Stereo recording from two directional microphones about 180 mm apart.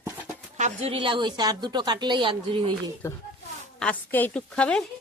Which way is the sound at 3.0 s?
15° left (ahead or behind).